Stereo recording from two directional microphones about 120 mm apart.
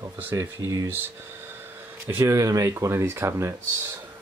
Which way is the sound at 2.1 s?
20° right (ahead or behind).